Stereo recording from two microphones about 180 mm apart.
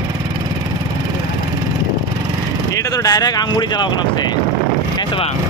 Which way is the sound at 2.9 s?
20° left (ahead or behind).